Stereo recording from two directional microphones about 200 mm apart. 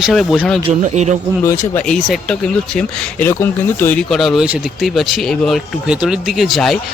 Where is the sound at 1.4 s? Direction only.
15° left (ahead or behind).